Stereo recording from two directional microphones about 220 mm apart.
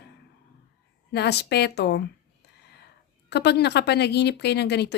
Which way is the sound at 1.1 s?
50° left (ahead or behind).